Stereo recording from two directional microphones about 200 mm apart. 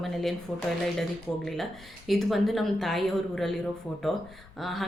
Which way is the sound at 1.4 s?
Centre (ahead or behind).